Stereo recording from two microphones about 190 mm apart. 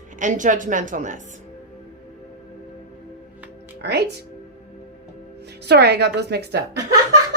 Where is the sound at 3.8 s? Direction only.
65° right (ahead or behind).